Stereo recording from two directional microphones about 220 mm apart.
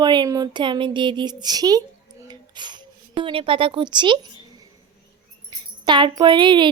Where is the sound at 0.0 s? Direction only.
20° right (ahead or behind).